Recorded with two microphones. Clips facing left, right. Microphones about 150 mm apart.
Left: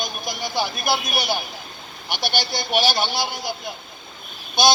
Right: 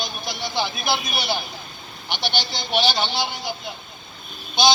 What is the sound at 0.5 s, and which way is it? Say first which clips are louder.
Speech: left 1 dB; 10° left (ahead or behind).